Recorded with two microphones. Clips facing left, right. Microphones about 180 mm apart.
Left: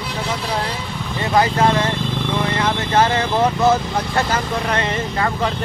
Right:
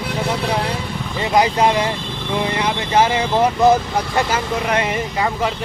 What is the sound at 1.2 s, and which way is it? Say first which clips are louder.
Speech: right 1 dB; 15° right (ahead or behind).